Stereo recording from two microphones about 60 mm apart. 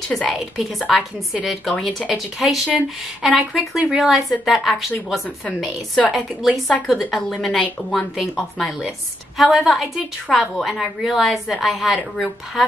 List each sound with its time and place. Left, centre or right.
0.1 s a woman's voice: centre